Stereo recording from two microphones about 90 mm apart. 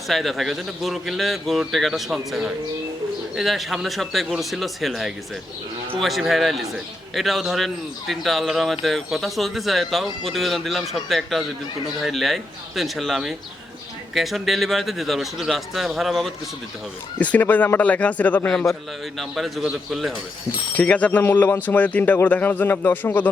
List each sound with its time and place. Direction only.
0.1 s a man's voice: centre (ahead or behind)
17.2 s speech: 15° left (ahead or behind)
19.6 s a man's voice: 5° right (ahead or behind)
20.7 s speech: 15° left (ahead or behind)